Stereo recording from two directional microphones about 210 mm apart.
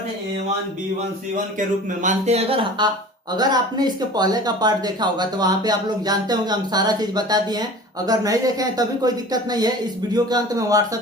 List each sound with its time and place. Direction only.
1.5 s speech: 35° right (ahead or behind); by 11.0 s 15° right (ahead or behind)